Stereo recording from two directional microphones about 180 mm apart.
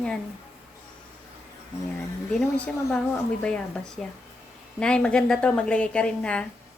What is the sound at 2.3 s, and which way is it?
A woman's voice, 5° left (ahead or behind).